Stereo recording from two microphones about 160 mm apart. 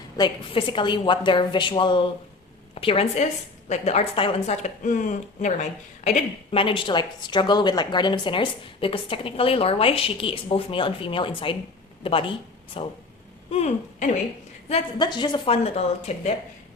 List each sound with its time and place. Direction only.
0.2 s a woman's voice: 30° left (ahead or behind); by 6.6 s 45° left (ahead or behind)
6.6 s a woman's voice: 35° left (ahead or behind)
14.7 s a woman's voice: 25° left (ahead or behind)